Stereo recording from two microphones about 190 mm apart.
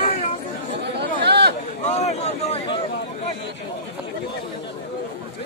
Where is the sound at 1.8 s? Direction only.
35° left (ahead or behind).